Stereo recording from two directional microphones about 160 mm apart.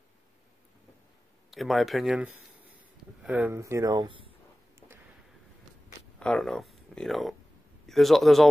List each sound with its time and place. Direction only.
1.5 s speech: centre (ahead or behind); by 4.3 s 30° right (ahead or behind)
6.1 s a man's voice: 5° left (ahead or behind)